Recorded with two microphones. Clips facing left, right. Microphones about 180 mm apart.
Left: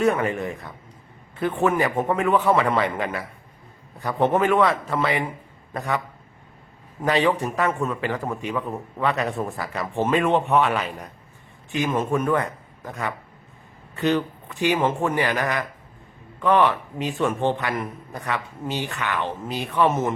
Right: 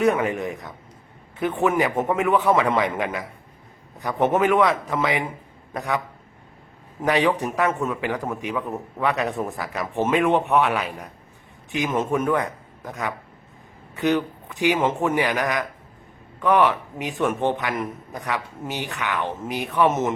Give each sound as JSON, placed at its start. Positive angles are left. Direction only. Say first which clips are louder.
{"t": 0.0, "sound": "a man's voice", "louder": "right 1 dB", "side_deg": -15}
{"t": 7.0, "sound": "a man's voice", "louder": "even", "side_deg": -15}
{"t": 16.4, "sound": "a man's voice", "louder": "even", "side_deg": -10}